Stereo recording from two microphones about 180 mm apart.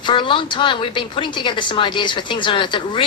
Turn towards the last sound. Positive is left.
turn(degrees=25)  # may be behind; listen again after turning